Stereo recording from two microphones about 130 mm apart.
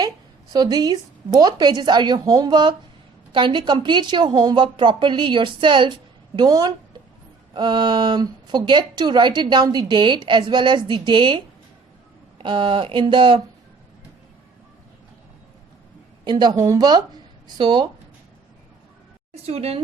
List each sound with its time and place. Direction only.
0.5 s speech: 30° right (ahead or behind)
16.2 s speech: 35° right (ahead or behind)
19.5 s speech: 50° right (ahead or behind)